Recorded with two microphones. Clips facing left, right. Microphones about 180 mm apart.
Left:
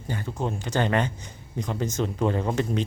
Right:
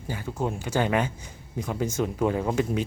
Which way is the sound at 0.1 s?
10° right (ahead or behind).